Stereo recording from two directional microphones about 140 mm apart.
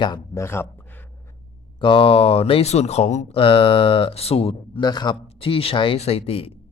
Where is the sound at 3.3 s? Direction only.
40° left (ahead or behind).